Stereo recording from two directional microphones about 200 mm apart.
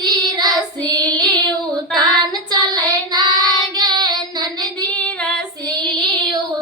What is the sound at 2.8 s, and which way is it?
Child singing, 20° right (ahead or behind).